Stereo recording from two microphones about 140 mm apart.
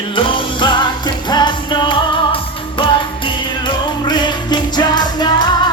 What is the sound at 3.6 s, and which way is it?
Music, 30° left (ahead or behind).